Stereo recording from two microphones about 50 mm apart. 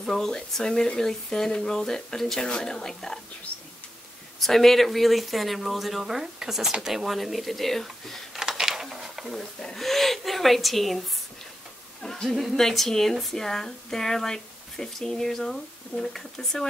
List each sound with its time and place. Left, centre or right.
0.0 s speech: centre
4.4 s speech: centre
8.4 s a sound: centre
9.6 s speech: centre
12.0 s a sound: centre
12.3 s speech: centre